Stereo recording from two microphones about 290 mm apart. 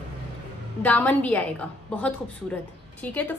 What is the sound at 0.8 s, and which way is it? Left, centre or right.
A woman's voice, centre.